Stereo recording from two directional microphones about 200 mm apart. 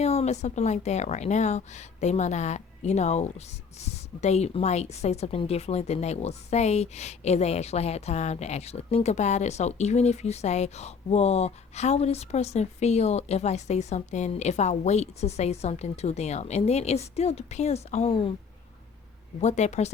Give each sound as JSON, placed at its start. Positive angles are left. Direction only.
{"t": 0.0, "sound": "a woman's voice", "side_deg": 30}
{"t": 19.4, "sound": "a woman's voice", "side_deg": 35}